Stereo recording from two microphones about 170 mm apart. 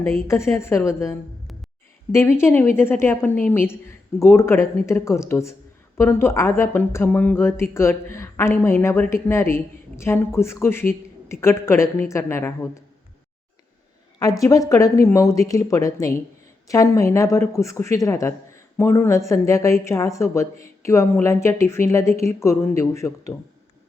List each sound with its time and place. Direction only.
0.3 s speech: 15° left (ahead or behind)
14.2 s speech: 20° left (ahead or behind)